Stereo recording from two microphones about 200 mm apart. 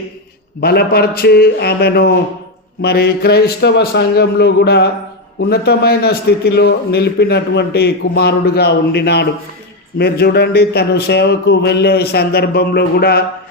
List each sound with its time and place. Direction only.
0.6 s a man's voice: 50° left (ahead or behind)